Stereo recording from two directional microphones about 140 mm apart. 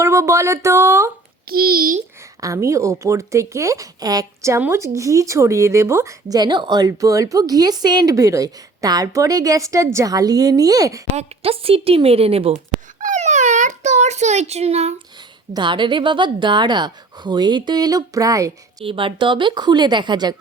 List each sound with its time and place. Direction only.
0.0 s speech: 20° right (ahead or behind)
1.5 s a child's voice: 90° right
2.4 s speech: 20° right (ahead or behind)
11.2 s a woman's voice: 45° right (ahead or behind)
13.0 s a sound: 60° right (ahead or behind)
15.5 s a woman's voice: 35° right (ahead or behind)
18.9 s a woman's voice: 40° right (ahead or behind)